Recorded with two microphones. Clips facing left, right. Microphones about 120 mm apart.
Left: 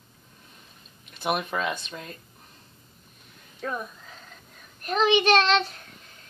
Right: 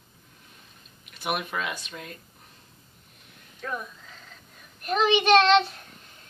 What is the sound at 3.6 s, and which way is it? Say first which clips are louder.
Speech: left 2 dB; 25° left (ahead or behind).